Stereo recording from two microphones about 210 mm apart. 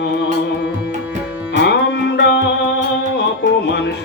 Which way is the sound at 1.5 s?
55° left (ahead or behind).